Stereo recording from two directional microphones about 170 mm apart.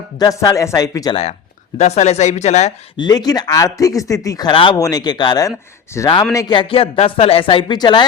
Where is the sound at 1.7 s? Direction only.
40° left (ahead or behind).